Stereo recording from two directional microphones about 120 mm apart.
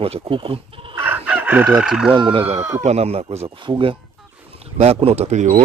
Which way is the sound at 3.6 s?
45° right (ahead or behind).